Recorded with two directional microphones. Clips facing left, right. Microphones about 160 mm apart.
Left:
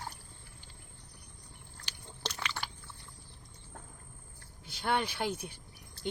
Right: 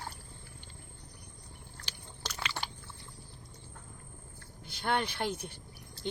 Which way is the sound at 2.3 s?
15° right (ahead or behind).